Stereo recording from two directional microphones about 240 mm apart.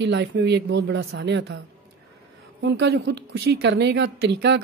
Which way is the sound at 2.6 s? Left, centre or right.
Right.